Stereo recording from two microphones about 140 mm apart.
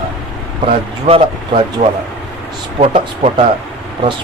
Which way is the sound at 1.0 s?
40° right (ahead or behind).